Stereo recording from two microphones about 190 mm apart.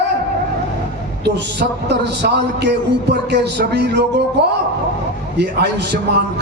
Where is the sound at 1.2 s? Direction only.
60° right (ahead or behind).